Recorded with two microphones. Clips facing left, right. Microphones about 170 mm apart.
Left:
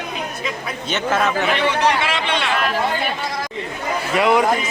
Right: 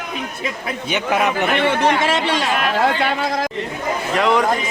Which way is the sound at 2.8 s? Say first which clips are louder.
Right 4 dB; 90° right.